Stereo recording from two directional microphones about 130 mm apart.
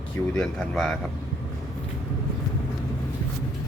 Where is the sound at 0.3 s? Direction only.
5° left (ahead or behind).